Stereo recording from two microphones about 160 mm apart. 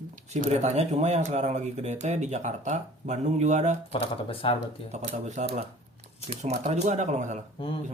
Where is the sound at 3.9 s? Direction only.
35° left (ahead or behind).